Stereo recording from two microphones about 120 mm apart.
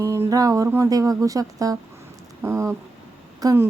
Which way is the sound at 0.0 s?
25° right (ahead or behind).